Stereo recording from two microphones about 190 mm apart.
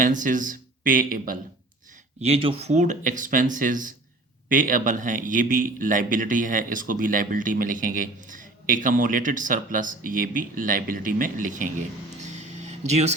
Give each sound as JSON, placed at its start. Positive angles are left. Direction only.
{"t": 0.0, "sound": "speech", "side_deg": -45}
{"t": 2.2, "sound": "speech", "side_deg": -30}
{"t": 12.4, "sound": "a sound", "side_deg": -35}